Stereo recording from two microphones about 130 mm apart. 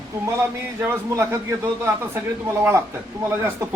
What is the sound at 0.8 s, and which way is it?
A man's voice, 20° right (ahead or behind).